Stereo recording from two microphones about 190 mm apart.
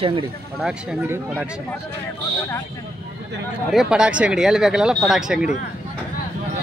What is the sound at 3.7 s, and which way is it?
Speech, 5° right (ahead or behind).